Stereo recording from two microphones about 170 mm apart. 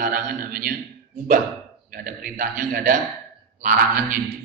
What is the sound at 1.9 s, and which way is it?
A man's voice, 55° right (ahead or behind).